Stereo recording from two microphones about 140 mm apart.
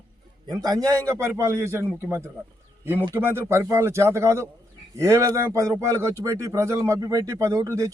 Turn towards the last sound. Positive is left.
turn(degrees=-25)  # may be behind; listen again after turning